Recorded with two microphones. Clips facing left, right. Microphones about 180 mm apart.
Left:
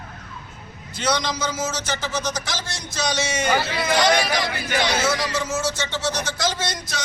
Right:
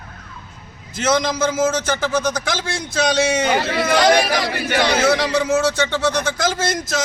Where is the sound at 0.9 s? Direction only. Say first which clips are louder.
Right 5 dB; 50° right (ahead or behind).